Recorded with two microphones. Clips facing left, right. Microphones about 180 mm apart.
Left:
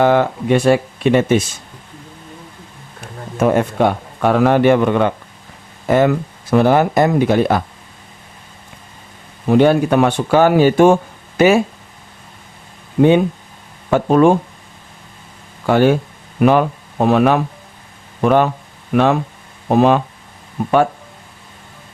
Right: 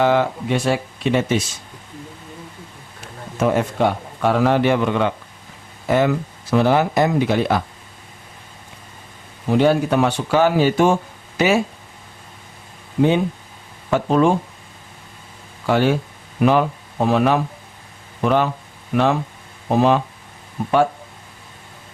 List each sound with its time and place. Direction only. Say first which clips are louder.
0.0 s speech: left 3 dB; 50° left (ahead or behind)
3.4 s a man's voice: left 4 dB; 55° left (ahead or behind)
9.5 s speech: left 4 dB; 60° left (ahead or behind)
13.0 s a man's voice: left 5 dB; 60° left (ahead or behind)
15.6 s a man's voice: left 5 dB; 50° left (ahead or behind)